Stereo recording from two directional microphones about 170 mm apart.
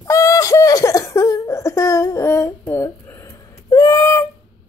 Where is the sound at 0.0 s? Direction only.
20° left (ahead or behind).